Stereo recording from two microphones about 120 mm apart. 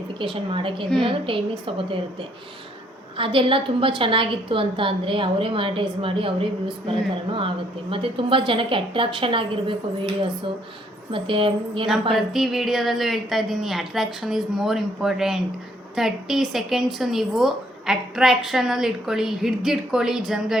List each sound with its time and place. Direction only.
0.2 s a woman's voice: 45° right (ahead or behind)
3.2 s a woman's voice: 45° right (ahead or behind)
11.1 s a woman's voice: 45° right (ahead or behind)
12.1 s a woman's voice: centre (ahead or behind)